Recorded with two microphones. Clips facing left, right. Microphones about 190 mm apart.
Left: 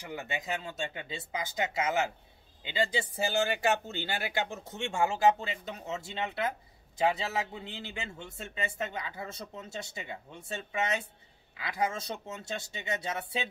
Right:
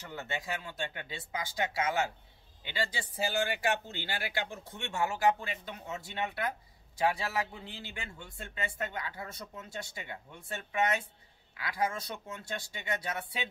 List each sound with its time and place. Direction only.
0.0 s a man's voice: 15° left (ahead or behind)